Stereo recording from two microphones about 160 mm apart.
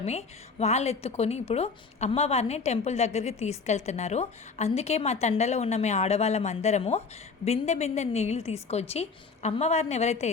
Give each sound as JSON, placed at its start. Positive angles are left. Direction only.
{"t": 0.0, "sound": "a woman's voice", "side_deg": 40}